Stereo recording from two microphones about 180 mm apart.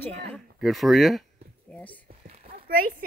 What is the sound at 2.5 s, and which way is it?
Speech, 55° right (ahead or behind).